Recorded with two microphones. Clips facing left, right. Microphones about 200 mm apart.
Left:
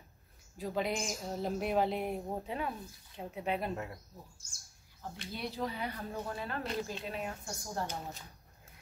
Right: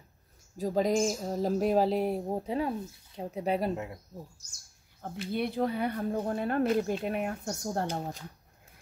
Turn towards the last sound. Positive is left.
turn(degrees=-60)  # may be behind; listen again after turning